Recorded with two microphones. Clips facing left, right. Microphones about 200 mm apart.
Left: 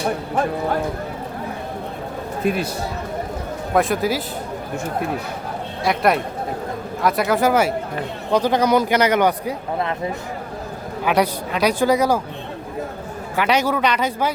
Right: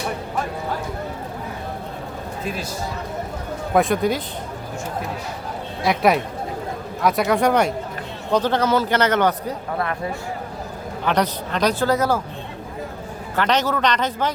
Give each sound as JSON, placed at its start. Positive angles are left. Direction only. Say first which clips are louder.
{"t": 2.4, "sound": "speech", "louder": "left 8 dB", "side_deg": 60}
{"t": 3.8, "sound": "speech", "louder": "even", "side_deg": 0}
{"t": 5.8, "sound": "a man's voice", "louder": "even", "side_deg": 0}
{"t": 11.0, "sound": "a man's voice", "louder": "left 2 dB", "side_deg": 10}
{"t": 13.3, "sound": "a man's voice", "louder": "left 1 dB", "side_deg": 10}